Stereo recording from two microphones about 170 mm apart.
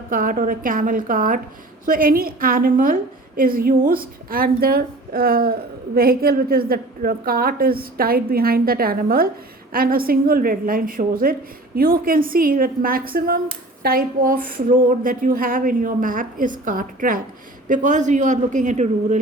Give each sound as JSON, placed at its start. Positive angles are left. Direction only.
{"t": 0.1, "sound": "a woman's voice", "side_deg": -55}